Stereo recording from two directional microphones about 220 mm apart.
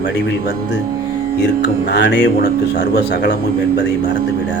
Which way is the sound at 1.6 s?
50° left (ahead or behind).